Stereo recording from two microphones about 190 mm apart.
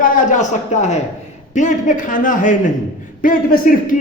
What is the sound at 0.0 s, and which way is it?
A man's voice, 45° left (ahead or behind).